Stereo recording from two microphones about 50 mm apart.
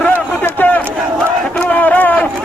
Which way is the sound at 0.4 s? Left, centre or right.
Left.